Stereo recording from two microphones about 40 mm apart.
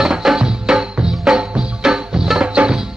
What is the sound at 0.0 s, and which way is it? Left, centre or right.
Music, centre.